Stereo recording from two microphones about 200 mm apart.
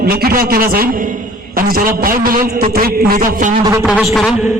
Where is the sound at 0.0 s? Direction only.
50° right (ahead or behind).